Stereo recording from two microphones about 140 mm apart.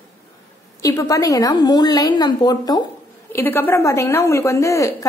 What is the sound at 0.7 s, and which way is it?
A woman's voice, 20° left (ahead or behind).